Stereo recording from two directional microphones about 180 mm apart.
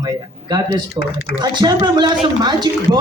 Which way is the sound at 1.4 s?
25° right (ahead or behind).